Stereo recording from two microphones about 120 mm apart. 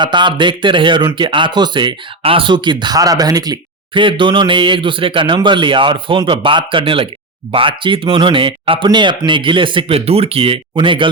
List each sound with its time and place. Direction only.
0.0 s speech: 40° right (ahead or behind)